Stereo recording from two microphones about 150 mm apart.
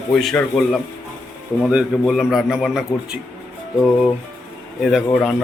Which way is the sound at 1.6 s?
5° right (ahead or behind).